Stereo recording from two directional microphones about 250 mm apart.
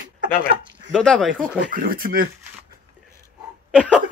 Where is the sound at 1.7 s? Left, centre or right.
Right.